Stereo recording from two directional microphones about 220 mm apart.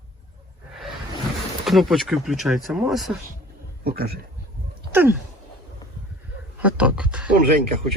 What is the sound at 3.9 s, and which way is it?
Speech, 45° right (ahead or behind).